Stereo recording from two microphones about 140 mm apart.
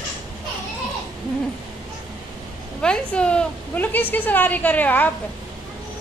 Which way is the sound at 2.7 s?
5° left (ahead or behind).